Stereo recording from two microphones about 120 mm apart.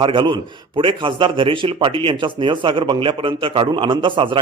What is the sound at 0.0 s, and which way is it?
A man's voice, 45° right (ahead or behind).